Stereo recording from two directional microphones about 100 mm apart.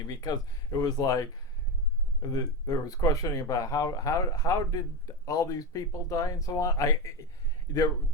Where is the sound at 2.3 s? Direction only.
40° left (ahead or behind).